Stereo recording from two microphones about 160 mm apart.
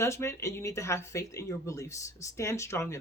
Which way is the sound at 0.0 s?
15° left (ahead or behind).